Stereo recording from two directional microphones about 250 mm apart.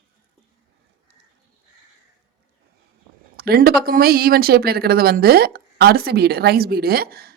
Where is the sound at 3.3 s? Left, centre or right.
Right.